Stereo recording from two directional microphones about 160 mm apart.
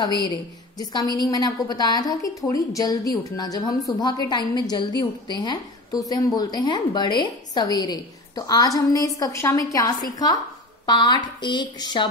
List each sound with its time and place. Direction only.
0.0 s a woman's voice: 25° left (ahead or behind)